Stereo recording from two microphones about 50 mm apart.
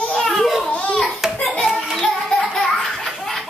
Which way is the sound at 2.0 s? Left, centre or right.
Centre.